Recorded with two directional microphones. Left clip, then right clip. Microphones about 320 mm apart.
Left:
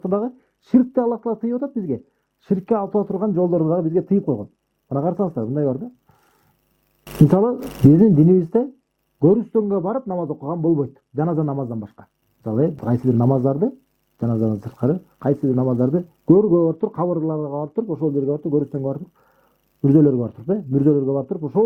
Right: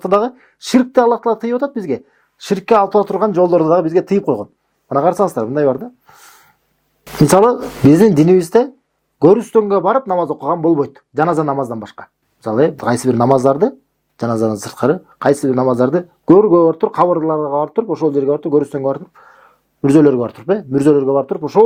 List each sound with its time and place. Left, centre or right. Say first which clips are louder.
0.0 s speech: right 9 dB; centre
2.4 s speech: right 9 dB; centre
7.3 s speech: right 10 dB; centre